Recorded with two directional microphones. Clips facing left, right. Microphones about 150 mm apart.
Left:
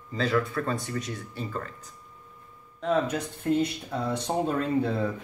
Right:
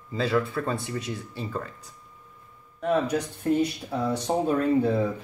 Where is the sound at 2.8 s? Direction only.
10° right (ahead or behind).